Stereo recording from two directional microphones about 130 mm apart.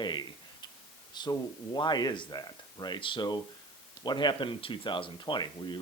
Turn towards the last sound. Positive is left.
turn(degrees=35)  # may be behind; listen again after turning